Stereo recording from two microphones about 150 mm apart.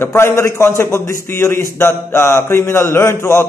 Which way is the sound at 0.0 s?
15° left (ahead or behind).